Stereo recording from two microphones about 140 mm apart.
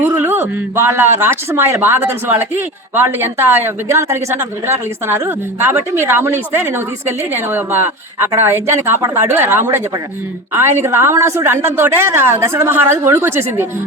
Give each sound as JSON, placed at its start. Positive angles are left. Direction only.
{"t": 0.0, "sound": "speech", "side_deg": -15}